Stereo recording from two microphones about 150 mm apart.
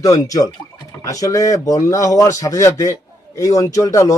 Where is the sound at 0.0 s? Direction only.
20° left (ahead or behind).